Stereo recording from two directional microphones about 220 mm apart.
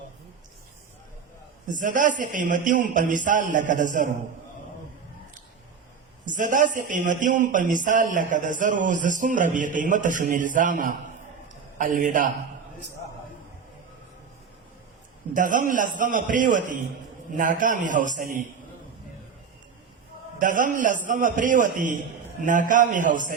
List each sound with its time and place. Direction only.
1.7 s a man's voice: 35° right (ahead or behind)
6.2 s a man's voice: 35° right (ahead or behind)
15.3 s a man's voice: 35° right (ahead or behind)
20.4 s a man's voice: 35° right (ahead or behind)